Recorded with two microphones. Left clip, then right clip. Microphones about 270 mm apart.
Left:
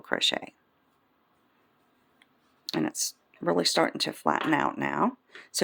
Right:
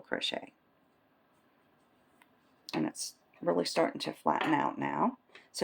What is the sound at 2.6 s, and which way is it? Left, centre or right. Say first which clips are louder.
Speech: left 5 dB; left.